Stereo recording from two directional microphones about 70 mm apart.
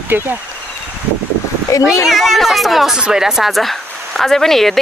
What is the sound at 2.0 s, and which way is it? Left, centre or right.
Speech, centre.